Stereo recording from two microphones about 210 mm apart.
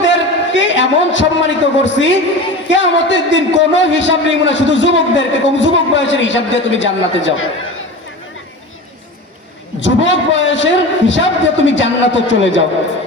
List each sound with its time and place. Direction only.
0.0 s a man's voice: 60° left (ahead or behind)
9.8 s a man's voice: 60° left (ahead or behind)